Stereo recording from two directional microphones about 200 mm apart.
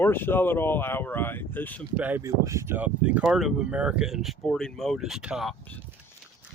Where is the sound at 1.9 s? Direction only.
10° right (ahead or behind).